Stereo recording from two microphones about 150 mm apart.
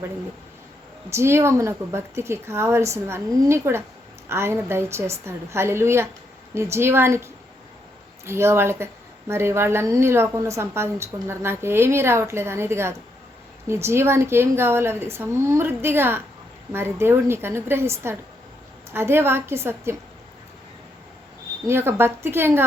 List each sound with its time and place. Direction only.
1.1 s a woman's voice: 15° right (ahead or behind)
21.7 s a woman's voice: 15° right (ahead or behind)